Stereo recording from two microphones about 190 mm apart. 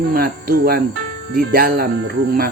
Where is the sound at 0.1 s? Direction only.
50° right (ahead or behind).